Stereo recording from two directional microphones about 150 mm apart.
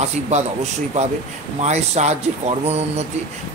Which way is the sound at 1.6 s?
50° right (ahead or behind).